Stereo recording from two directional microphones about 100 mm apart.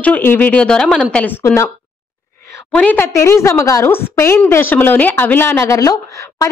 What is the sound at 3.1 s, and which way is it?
Speech, 30° left (ahead or behind).